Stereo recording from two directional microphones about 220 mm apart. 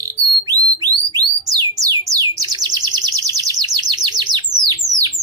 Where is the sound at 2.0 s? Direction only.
15° right (ahead or behind).